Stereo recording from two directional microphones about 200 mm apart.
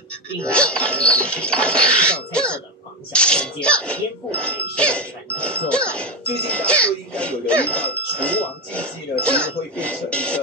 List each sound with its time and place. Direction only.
0.5 s speech: 5° left (ahead or behind)